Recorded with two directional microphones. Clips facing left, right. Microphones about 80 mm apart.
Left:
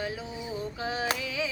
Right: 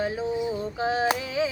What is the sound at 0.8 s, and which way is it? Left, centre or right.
Female singing, right.